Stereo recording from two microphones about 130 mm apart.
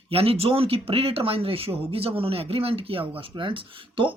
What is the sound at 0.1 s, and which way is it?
Speech, 50° right (ahead or behind).